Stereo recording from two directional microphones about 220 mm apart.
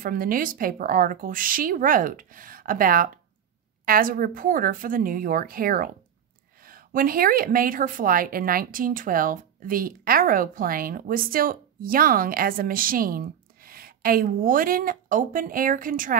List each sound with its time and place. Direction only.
0.0 s a woman's voice: 40° right (ahead or behind)